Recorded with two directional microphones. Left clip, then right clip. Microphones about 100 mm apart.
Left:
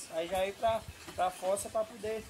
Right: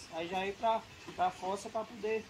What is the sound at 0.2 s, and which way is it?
Speech, 40° left (ahead or behind).